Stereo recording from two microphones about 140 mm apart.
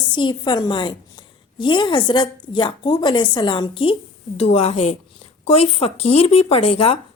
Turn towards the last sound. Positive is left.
turn(degrees=45)  # may be behind; listen again after turning